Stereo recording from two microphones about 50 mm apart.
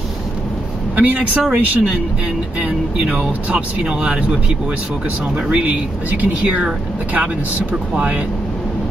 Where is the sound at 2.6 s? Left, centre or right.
Right.